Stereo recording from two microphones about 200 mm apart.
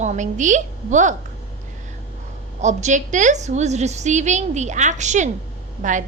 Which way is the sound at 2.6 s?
35° right (ahead or behind).